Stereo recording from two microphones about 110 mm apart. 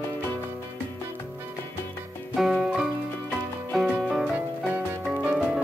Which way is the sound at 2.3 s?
5° right (ahead or behind).